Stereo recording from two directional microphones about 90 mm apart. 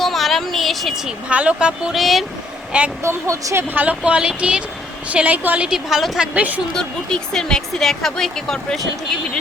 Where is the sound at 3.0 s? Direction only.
35° right (ahead or behind).